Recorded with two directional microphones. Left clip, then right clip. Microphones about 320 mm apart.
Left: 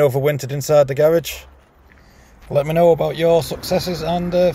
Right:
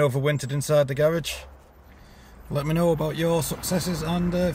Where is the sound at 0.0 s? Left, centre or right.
Centre.